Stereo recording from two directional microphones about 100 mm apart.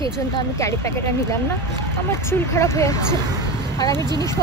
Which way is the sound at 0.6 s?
30° left (ahead or behind).